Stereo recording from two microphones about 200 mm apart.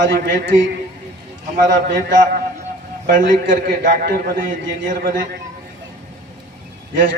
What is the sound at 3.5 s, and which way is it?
Speech, 45° right (ahead or behind).